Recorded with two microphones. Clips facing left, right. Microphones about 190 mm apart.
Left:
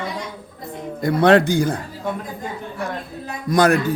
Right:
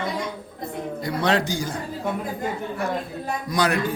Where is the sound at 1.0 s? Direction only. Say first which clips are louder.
Left 9 dB; 55° left (ahead or behind).